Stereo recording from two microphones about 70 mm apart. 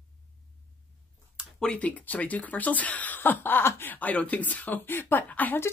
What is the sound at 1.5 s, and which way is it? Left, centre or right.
Speech, centre.